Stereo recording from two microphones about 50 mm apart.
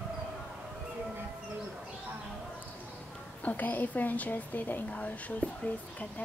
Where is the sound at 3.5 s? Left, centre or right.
Left.